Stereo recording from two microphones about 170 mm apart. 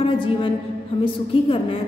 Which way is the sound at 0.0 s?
30° left (ahead or behind).